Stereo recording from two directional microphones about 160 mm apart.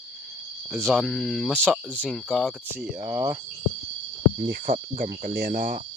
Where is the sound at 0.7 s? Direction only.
5° right (ahead or behind).